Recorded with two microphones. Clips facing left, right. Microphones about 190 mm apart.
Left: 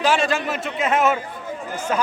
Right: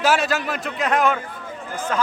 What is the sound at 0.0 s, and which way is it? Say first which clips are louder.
A man's voice: even; 5° right (ahead or behind).